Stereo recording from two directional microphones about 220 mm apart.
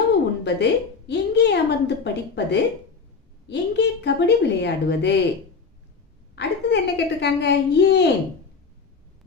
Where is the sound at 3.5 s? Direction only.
50° left (ahead or behind).